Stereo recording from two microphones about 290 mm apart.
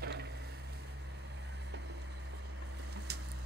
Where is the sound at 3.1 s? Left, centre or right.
Right.